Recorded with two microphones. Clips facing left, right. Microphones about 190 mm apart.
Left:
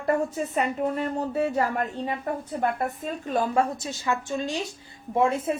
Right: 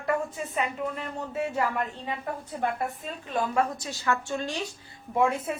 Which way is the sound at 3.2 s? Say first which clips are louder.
Left 3 dB; 35° left (ahead or behind).